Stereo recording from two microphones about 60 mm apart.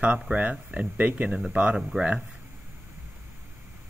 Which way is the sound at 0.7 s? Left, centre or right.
Right.